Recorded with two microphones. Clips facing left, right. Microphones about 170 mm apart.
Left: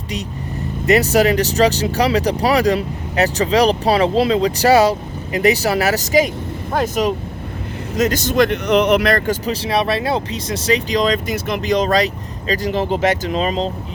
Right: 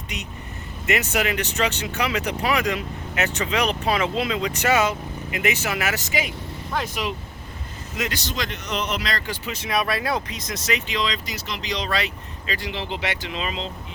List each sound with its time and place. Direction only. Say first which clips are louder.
0.9 s speech: left 10 dB; 35° left (ahead or behind)